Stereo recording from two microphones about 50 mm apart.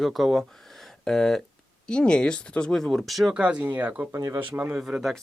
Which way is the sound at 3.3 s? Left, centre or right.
Right.